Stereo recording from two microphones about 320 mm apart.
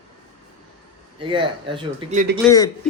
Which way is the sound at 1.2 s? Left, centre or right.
Centre.